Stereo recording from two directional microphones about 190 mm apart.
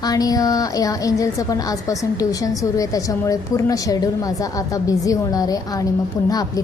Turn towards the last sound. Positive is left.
turn(degrees=20)  # may be behind; listen again after turning